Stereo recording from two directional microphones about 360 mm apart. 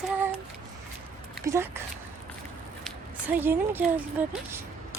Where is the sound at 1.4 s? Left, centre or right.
Centre.